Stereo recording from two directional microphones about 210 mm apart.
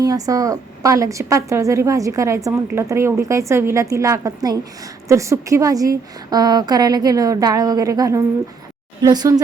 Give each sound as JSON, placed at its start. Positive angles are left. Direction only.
{"t": 0.0, "sound": "a woman's voice", "side_deg": -15}